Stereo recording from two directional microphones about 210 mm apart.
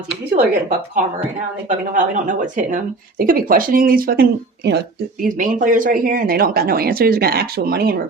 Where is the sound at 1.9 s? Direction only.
35° right (ahead or behind).